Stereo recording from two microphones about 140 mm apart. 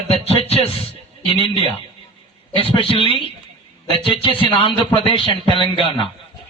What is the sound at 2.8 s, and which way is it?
Speech, 40° left (ahead or behind).